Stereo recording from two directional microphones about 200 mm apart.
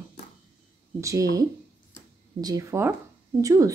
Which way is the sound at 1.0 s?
15° right (ahead or behind).